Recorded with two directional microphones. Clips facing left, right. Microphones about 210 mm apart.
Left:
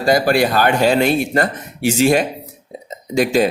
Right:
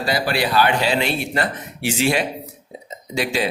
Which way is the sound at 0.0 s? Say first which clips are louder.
Left 7 dB; 45° left (ahead or behind).